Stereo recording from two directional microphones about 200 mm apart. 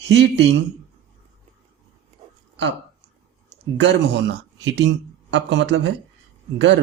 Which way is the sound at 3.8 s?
60° right (ahead or behind).